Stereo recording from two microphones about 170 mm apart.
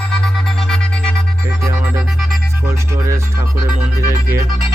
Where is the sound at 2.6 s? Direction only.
15° right (ahead or behind).